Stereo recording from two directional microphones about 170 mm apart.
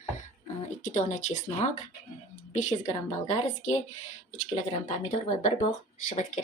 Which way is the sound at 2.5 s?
45° left (ahead or behind).